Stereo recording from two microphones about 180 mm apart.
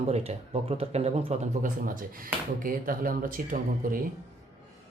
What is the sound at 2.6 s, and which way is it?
Speech, 50° right (ahead or behind).